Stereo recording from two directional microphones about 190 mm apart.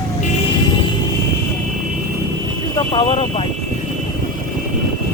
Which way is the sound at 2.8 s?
30° left (ahead or behind).